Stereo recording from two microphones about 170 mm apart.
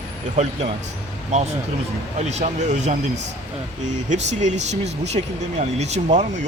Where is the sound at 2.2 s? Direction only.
40° right (ahead or behind).